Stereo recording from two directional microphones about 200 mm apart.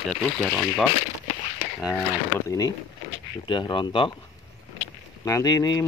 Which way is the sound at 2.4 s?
15° left (ahead or behind).